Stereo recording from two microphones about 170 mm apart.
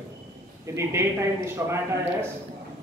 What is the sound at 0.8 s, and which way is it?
A man's voice, 15° right (ahead or behind).